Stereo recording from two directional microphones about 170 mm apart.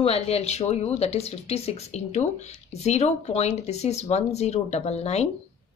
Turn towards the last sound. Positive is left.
turn(degrees=40)  # may be behind; listen again after turning